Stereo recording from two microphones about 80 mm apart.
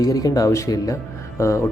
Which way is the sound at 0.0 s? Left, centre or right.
Left.